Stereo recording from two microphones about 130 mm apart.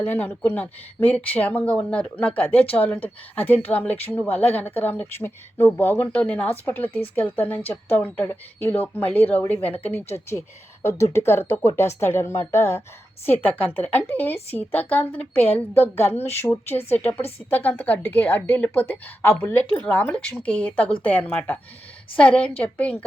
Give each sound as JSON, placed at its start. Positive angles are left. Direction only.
{"t": 0.0, "sound": "speech", "side_deg": 15}